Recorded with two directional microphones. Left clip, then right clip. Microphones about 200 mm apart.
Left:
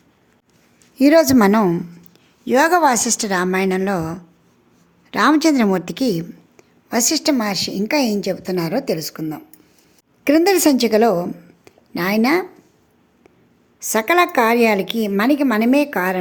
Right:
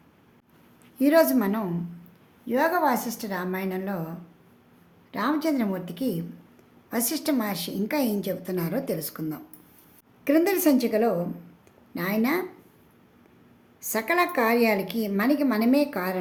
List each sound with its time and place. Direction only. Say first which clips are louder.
0.9 s a woman's voice: left 8 dB; 40° left (ahead or behind)
10.2 s a woman's voice: left 8 dB; 40° left (ahead or behind)
13.7 s a woman's voice: left 9 dB; 30° left (ahead or behind)